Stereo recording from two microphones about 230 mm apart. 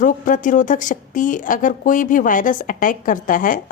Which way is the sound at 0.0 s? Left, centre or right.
Left.